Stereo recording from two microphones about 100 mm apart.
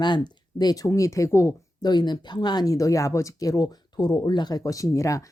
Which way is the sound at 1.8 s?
45° left (ahead or behind).